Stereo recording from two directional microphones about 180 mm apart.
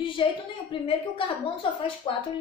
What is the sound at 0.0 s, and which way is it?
A woman's voice, 30° left (ahead or behind).